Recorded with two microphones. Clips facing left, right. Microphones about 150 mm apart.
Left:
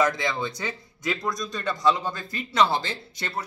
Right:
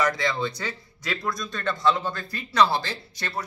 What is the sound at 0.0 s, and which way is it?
Speech, 20° left (ahead or behind).